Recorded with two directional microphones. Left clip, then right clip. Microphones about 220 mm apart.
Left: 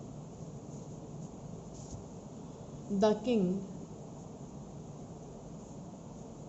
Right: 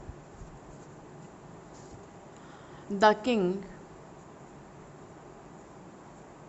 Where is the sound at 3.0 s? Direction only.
35° right (ahead or behind).